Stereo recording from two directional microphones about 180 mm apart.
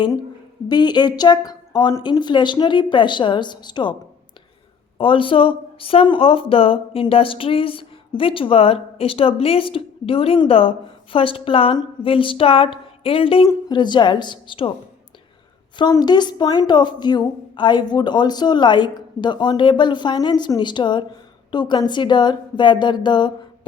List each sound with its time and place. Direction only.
0.7 s a woman's voice: 25° left (ahead or behind)
4.9 s a woman's voice: 30° left (ahead or behind)
15.7 s a woman's voice: 25° left (ahead or behind)